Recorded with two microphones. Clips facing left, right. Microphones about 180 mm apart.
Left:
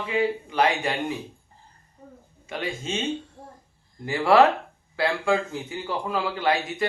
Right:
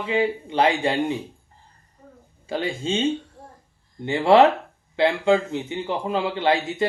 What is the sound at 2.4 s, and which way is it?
Speech, 30° right (ahead or behind).